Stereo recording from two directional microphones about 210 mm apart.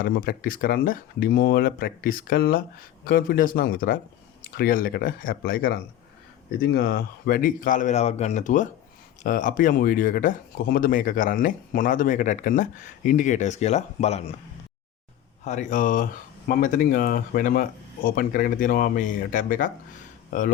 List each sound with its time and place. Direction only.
0.0 s speech: 45° left (ahead or behind)
15.4 s speech: 35° left (ahead or behind)